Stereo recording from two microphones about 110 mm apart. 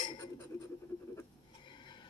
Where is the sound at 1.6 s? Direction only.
45° left (ahead or behind).